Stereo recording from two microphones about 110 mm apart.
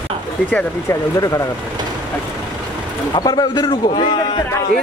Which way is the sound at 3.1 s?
40° left (ahead or behind).